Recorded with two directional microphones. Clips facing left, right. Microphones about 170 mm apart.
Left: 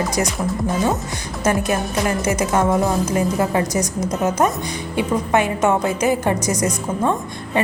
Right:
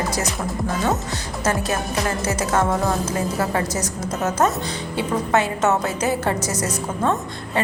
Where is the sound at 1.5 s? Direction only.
15° left (ahead or behind).